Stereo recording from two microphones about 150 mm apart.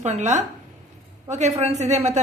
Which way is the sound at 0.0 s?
50° right (ahead or behind).